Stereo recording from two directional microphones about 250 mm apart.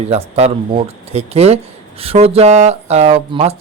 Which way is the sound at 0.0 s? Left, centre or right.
Right.